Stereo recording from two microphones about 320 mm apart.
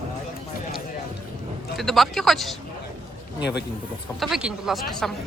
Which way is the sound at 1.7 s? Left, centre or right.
Centre.